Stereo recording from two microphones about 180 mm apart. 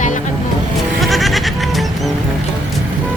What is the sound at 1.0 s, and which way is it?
Goat, centre (ahead or behind).